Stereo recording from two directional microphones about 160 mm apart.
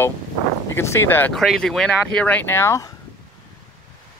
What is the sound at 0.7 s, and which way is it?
Speech, 15° left (ahead or behind).